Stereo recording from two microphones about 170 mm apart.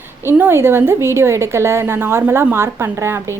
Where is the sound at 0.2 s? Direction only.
15° right (ahead or behind).